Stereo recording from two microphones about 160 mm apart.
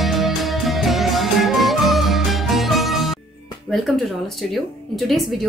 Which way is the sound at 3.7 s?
Centre (ahead or behind).